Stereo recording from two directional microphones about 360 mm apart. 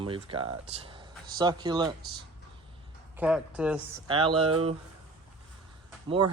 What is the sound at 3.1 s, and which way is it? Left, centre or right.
Speech, centre.